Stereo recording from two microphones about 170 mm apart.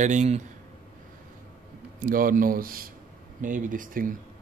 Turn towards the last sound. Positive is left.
turn(degrees=-55)  # may be behind; listen again after turning